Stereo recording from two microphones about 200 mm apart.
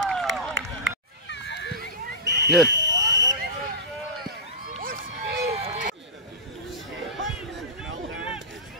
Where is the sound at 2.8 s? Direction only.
65° right (ahead or behind).